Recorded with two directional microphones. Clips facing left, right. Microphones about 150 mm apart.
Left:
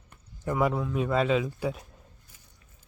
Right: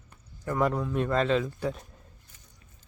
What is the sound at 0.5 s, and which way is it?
Speech, 5° left (ahead or behind).